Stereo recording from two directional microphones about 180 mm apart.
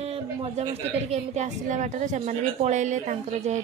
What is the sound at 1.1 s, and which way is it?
A woman's voice, 40° right (ahead or behind).